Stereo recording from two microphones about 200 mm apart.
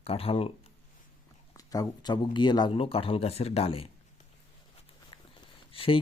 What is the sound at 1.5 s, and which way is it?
Speech, 15° left (ahead or behind).